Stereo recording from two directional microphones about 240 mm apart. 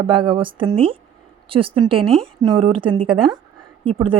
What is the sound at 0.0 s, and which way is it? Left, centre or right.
Speech, right.